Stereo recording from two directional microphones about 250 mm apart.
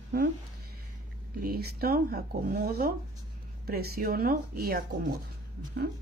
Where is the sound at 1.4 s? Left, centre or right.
Right.